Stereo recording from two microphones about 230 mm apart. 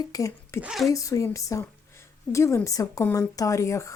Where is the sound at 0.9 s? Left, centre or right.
Centre.